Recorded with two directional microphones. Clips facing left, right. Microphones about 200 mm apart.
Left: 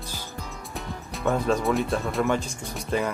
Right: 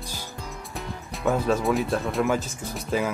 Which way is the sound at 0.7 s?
Centre (ahead or behind).